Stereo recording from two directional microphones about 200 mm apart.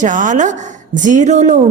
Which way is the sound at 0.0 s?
40° right (ahead or behind).